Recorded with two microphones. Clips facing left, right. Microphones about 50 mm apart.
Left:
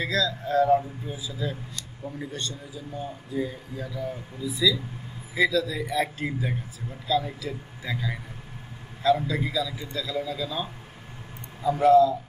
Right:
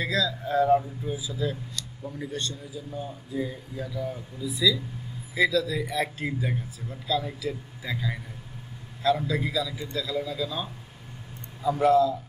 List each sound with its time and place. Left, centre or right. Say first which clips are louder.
0.0 s speech: left 1 dB; centre